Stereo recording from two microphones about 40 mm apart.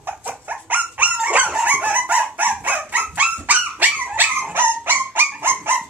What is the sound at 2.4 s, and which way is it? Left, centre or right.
Dog, right.